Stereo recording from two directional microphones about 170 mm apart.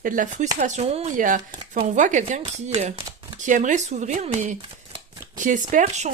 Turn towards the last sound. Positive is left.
turn(degrees=-45)  # may be behind; listen again after turning